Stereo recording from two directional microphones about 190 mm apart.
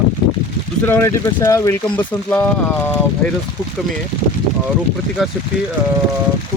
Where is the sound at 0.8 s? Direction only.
15° left (ahead or behind).